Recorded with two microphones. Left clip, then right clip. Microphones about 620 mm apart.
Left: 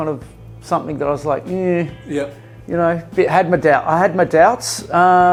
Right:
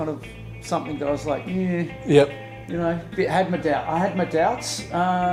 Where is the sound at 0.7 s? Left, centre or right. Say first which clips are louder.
Left 6 dB; left.